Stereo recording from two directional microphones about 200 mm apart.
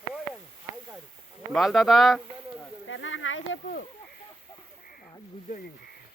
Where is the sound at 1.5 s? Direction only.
Centre (ahead or behind).